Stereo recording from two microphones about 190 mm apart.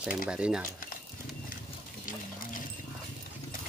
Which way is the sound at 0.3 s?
5° right (ahead or behind).